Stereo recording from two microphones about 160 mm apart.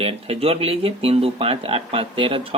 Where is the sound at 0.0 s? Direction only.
40° right (ahead or behind).